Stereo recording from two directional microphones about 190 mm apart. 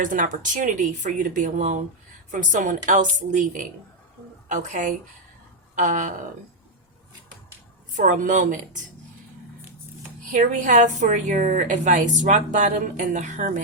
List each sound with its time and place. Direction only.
0.0 s a woman's voice: 45° right (ahead or behind)
5.7 s a sound: 40° right (ahead or behind)
7.9 s a woman's voice: 40° right (ahead or behind)
10.3 s a woman's voice: 45° right (ahead or behind)